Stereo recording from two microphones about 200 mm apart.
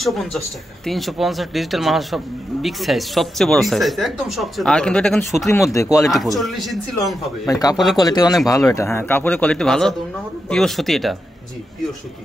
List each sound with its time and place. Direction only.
0.0 s speech: centre (ahead or behind)
5.7 s speech: 15° left (ahead or behind)
6.0 s speech: centre (ahead or behind)
7.4 s speech: 20° left (ahead or behind)
7.7 s speech: centre (ahead or behind)
8.0 s speech: 20° left (ahead or behind); by 11.1 s centre (ahead or behind)